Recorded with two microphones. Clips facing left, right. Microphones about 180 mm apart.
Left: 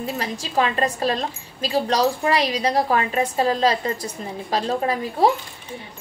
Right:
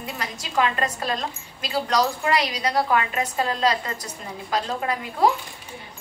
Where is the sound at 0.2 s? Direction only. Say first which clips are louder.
Even; 30° left (ahead or behind).